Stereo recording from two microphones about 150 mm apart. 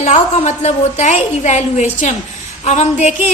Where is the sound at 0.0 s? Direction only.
50° left (ahead or behind).